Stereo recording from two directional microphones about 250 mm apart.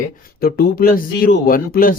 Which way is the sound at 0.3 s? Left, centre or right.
Left.